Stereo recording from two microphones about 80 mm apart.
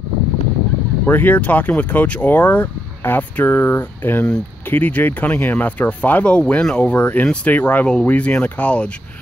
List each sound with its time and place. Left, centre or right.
1.0 s speech: left